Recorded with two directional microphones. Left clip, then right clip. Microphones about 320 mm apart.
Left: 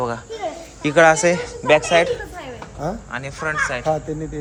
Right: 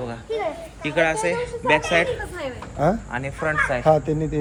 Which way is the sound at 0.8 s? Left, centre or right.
Left.